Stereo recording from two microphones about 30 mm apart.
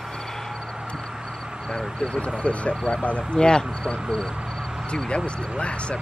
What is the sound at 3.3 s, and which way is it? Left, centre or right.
Speech, left.